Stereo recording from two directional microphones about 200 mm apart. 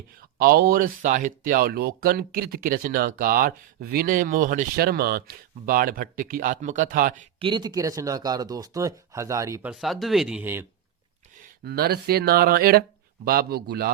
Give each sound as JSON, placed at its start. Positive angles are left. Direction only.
{"t": 0.2, "sound": "speech", "side_deg": -50}
{"t": 7.3, "sound": "speech", "side_deg": -25}
{"t": 9.7, "sound": "speech", "side_deg": 0}
{"t": 11.6, "sound": "speech", "side_deg": -55}